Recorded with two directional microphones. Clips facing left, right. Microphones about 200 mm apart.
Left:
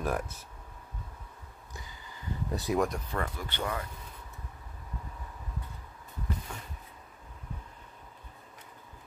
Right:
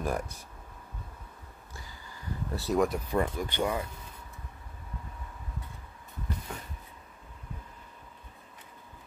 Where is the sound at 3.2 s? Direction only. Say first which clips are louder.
Right 7 dB; 15° right (ahead or behind).